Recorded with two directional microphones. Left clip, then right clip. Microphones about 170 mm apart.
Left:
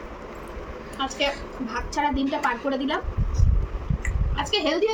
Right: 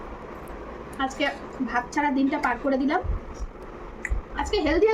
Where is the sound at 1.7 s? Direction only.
25° right (ahead or behind).